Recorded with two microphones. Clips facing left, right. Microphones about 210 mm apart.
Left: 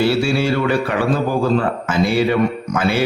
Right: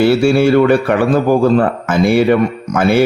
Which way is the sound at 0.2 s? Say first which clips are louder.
Right 8 dB; 55° right (ahead or behind).